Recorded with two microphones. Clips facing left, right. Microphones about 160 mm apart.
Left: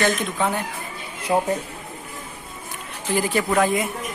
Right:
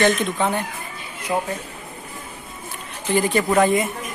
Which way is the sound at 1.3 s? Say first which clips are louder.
Left 3 dB; 20° left (ahead or behind).